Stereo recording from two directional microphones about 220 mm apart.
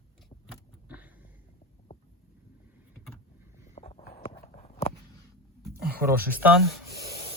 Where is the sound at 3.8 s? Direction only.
30° left (ahead or behind).